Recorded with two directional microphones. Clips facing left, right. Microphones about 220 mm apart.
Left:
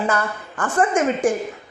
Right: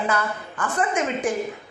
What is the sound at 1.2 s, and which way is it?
Speech, 50° left (ahead or behind).